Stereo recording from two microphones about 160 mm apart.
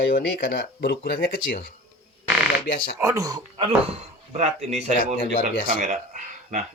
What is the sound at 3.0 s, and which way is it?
Speech, 20° right (ahead or behind).